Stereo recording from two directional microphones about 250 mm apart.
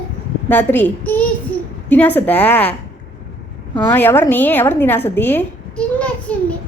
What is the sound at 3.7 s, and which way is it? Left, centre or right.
A woman's voice, centre.